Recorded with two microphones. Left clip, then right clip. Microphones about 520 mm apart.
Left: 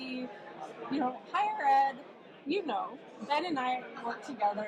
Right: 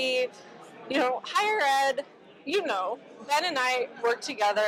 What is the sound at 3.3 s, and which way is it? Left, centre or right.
Speech, right.